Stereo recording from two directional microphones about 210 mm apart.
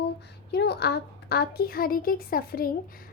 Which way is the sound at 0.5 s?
50° left (ahead or behind).